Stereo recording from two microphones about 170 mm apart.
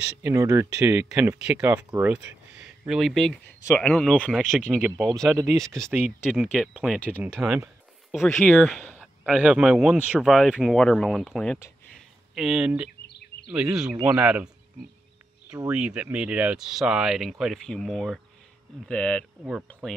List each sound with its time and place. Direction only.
0.2 s speech: 20° right (ahead or behind)
1.9 s a sound: 10° right (ahead or behind)
2.9 s speech: centre (ahead or behind)
5.9 s speech: 10° right (ahead or behind)
7.4 s a sound: 5° right (ahead or behind)
8.5 s speech: centre (ahead or behind)
11.9 s a sound: 5° right (ahead or behind)
13.5 s speech: 5° right (ahead or behind)
13.9 s speech: 15° right (ahead or behind)
15.5 s speech: 5° right (ahead or behind)